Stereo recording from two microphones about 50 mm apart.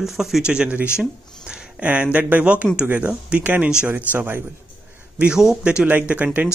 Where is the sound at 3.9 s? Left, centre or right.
Right.